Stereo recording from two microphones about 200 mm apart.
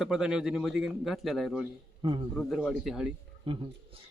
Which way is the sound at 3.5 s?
25° right (ahead or behind).